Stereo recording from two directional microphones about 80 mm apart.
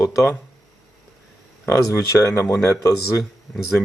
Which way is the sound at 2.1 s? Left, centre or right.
Left.